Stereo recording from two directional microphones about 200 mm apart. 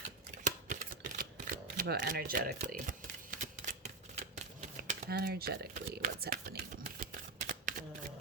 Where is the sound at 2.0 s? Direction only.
50° right (ahead or behind).